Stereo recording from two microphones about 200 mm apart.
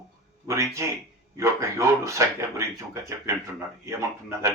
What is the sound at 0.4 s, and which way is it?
Speech, 15° right (ahead or behind).